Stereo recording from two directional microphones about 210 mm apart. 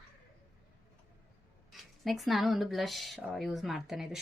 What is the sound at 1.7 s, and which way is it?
Speech, centre (ahead or behind).